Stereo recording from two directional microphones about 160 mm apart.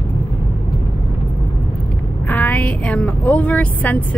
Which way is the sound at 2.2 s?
10° left (ahead or behind).